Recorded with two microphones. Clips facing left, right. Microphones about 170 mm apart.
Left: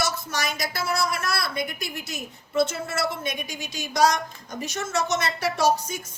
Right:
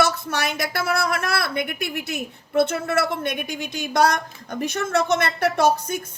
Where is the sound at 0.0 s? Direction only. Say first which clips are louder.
Right 6 dB; 60° right (ahead or behind).